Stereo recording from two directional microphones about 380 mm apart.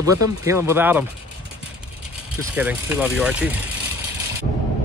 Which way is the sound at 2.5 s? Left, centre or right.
Centre.